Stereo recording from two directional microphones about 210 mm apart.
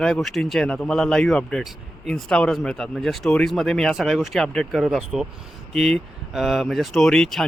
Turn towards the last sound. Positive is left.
turn(degrees=0)  # may be behind; listen again after turning